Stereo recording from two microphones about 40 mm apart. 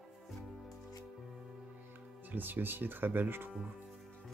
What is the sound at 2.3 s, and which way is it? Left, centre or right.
Speech, right.